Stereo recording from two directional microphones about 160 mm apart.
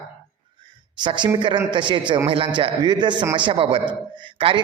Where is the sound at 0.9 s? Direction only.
30° right (ahead or behind).